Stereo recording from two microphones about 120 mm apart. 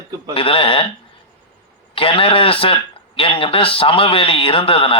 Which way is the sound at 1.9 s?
50° left (ahead or behind).